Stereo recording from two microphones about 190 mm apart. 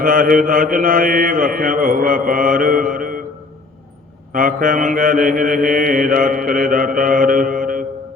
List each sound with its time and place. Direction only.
0.0 s mantra: 50° right (ahead or behind)
4.3 s mantra: 45° right (ahead or behind)